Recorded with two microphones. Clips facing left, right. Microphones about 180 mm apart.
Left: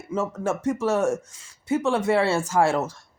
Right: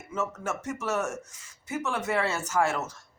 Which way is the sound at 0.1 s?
30° left (ahead or behind).